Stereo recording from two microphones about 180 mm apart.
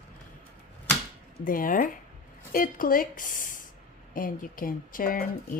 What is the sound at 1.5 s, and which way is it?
Speech, 50° left (ahead or behind).